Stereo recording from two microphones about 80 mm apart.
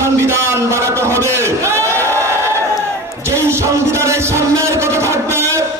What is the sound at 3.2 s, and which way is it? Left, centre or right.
Music, right.